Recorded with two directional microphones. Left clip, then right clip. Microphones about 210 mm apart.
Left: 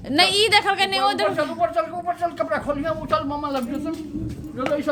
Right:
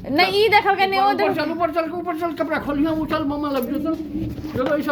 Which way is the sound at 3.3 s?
40° left (ahead or behind).